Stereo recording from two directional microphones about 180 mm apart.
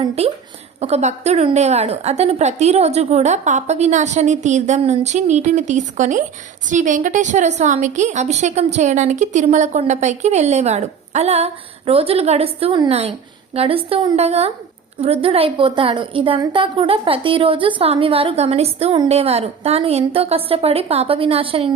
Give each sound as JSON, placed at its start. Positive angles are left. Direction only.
{"t": 0.2, "sound": "a woman's voice", "side_deg": -35}